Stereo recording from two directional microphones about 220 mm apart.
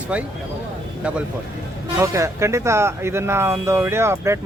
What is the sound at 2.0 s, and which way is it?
Speech, 15° right (ahead or behind).